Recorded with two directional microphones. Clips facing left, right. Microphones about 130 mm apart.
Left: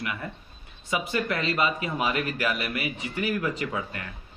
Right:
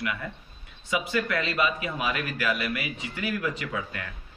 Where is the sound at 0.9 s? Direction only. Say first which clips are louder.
Even; 30° left (ahead or behind).